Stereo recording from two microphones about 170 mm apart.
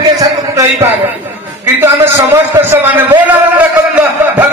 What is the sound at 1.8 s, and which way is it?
A man's voice, 15° right (ahead or behind).